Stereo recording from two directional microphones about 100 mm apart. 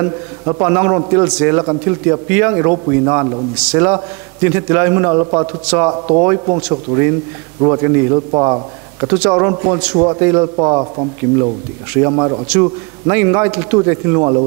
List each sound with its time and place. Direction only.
0.0 s a man's voice: 25° right (ahead or behind)
9.8 s a man's voice: 10° right (ahead or behind)
10.2 s a man's voice: 25° right (ahead or behind)